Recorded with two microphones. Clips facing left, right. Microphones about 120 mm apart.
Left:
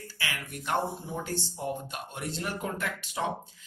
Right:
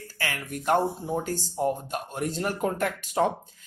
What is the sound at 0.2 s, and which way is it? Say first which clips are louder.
Speech: right 5 dB; 45° right (ahead or behind).